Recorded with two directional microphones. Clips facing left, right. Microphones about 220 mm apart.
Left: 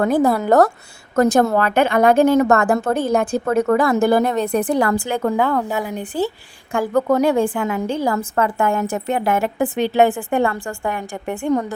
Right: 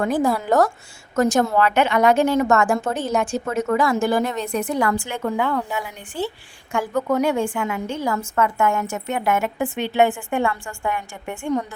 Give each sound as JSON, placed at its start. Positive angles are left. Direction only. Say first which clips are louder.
{"t": 0.1, "sound": "a woman's voice", "louder": "left 4 dB", "side_deg": 60}
{"t": 4.6, "sound": "a woman's voice", "louder": "left 4 dB", "side_deg": 35}